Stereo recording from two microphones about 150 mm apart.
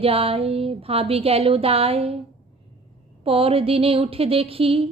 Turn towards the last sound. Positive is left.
turn(degrees=-40)  # may be behind; listen again after turning